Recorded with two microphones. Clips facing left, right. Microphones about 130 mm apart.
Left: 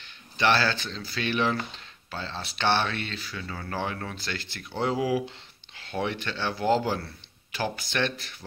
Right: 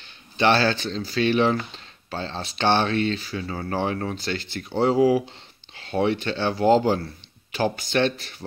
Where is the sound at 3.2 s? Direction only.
35° right (ahead or behind).